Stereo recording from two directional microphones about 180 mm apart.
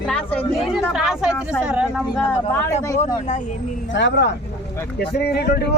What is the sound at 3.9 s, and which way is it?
Speech, 80° left.